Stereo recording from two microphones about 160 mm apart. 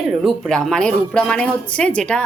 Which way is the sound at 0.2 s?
Centre (ahead or behind).